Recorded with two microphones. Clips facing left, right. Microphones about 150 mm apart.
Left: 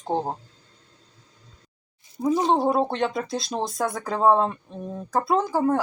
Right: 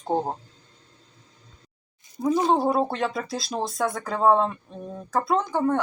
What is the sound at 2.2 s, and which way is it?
Speech, 10° left (ahead or behind).